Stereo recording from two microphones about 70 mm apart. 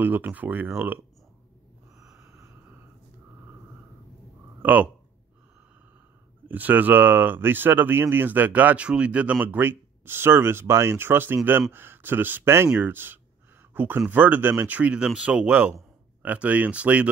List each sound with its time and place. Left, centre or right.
0.0 s speech: right
2.2 s a sound: right
4.6 s speech: right
6.4 s speech: right